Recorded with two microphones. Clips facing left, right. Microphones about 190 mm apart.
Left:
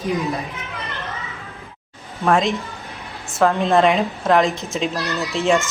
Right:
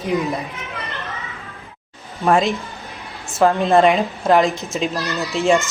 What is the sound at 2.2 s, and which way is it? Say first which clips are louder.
A child's voice: right 1 dB; centre (ahead or behind).